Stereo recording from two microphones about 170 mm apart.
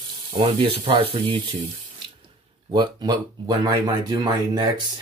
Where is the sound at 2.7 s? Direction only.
25° right (ahead or behind).